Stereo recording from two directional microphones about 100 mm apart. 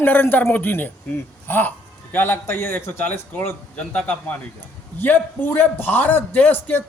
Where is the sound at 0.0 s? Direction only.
20° left (ahead or behind).